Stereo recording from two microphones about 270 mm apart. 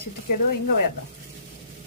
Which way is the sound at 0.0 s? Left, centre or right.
Left.